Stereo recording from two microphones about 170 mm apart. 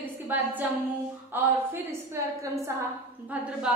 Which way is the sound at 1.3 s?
15° right (ahead or behind).